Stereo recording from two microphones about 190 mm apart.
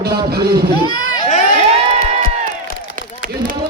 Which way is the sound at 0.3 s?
55° right (ahead or behind).